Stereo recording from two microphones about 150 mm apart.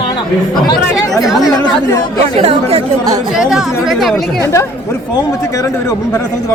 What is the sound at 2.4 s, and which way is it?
Speech, 45° right (ahead or behind).